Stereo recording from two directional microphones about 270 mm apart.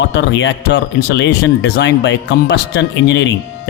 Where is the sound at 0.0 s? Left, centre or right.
Left.